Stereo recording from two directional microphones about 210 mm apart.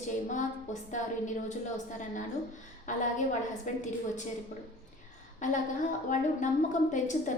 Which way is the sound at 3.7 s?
35° left (ahead or behind).